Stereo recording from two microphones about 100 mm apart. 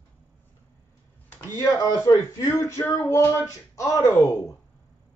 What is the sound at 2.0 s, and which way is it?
Speech, 35° left (ahead or behind).